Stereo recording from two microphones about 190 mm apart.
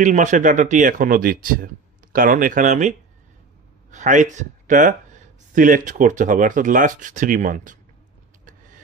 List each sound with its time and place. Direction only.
0.0 s speech: 40° right (ahead or behind)